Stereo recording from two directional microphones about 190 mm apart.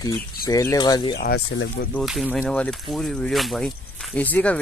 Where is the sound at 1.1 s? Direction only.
60° left (ahead or behind).